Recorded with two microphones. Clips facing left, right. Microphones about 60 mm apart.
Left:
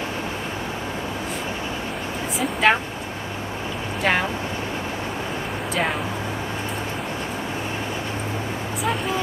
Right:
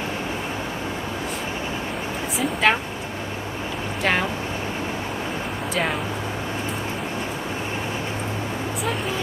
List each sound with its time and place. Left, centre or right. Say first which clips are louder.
2.3 s speech: left 1 dB; centre
4.0 s speech: left 1 dB; centre